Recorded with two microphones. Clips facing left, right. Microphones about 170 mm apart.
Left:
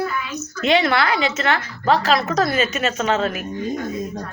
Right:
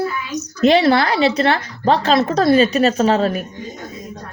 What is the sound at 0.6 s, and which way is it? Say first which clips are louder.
Speech: right 5 dB; 35° right (ahead or behind).